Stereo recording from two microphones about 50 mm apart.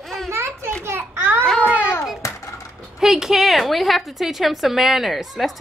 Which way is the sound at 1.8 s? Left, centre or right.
Left.